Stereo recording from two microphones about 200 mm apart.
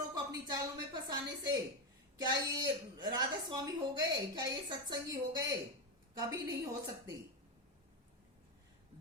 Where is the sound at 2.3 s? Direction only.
20° right (ahead or behind).